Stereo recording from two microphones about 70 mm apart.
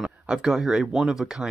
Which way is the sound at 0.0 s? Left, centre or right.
Centre.